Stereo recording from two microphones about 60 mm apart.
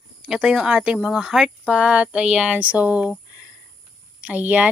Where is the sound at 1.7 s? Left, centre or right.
Centre.